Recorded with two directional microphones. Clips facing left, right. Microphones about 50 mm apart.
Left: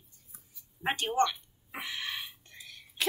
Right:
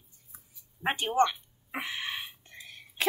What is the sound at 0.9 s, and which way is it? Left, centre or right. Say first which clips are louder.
Speech: right 2 dB; centre.